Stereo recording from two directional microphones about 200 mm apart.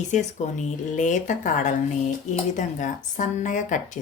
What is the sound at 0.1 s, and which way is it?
Speech, 35° left (ahead or behind).